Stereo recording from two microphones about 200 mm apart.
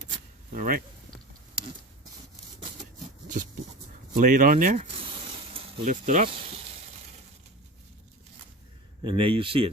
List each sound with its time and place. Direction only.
0.5 s speech: 45° right (ahead or behind)
4.1 s speech: 40° right (ahead or behind)
9.0 s speech: 25° right (ahead or behind)